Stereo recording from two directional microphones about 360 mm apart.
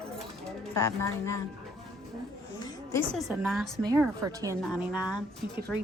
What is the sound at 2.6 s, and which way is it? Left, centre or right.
A woman's voice, centre.